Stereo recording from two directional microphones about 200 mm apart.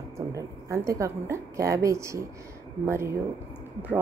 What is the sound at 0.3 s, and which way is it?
A woman's voice, 15° right (ahead or behind).